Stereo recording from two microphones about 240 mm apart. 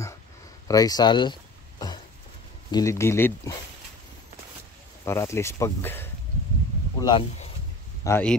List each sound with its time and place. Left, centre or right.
0.7 s a sound: centre
2.7 s speech: centre
5.0 s speech: centre
8.0 s speech: centre